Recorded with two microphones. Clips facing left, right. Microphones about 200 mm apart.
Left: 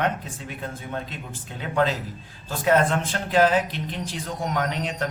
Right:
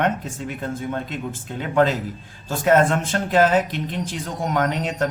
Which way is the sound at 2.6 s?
45° right (ahead or behind).